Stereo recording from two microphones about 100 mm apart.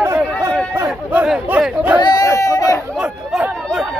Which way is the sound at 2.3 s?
30° left (ahead or behind).